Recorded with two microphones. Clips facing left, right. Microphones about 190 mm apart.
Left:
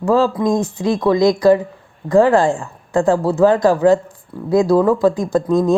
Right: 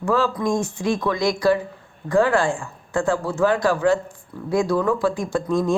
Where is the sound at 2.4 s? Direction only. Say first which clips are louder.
Left 6 dB; 35° left (ahead or behind).